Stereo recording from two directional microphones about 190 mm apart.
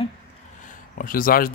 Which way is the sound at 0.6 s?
45° left (ahead or behind).